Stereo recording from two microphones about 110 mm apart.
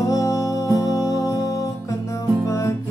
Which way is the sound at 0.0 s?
30° left (ahead or behind).